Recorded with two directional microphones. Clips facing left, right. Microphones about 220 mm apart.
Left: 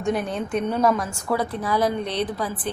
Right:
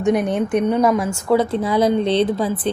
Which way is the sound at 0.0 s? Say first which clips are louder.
Right 7 dB; 20° right (ahead or behind).